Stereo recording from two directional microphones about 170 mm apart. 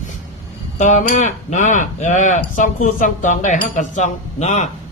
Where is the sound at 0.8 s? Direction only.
45° left (ahead or behind).